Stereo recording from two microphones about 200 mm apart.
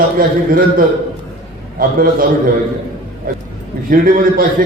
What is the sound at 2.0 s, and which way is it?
A man's voice, 45° right (ahead or behind).